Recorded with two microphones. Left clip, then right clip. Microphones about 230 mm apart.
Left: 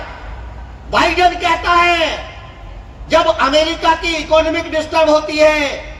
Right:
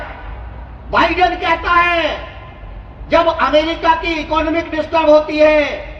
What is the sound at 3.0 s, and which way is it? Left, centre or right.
A man's voice, left.